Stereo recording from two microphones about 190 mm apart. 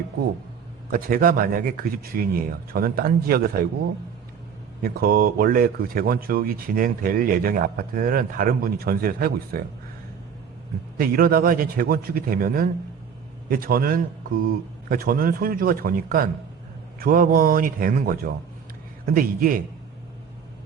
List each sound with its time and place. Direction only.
0.9 s speech: 50° right (ahead or behind)
4.8 s speech: 50° right (ahead or behind)
10.9 s speech: 50° right (ahead or behind)